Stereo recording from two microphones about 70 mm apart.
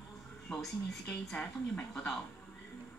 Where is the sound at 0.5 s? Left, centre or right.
Centre.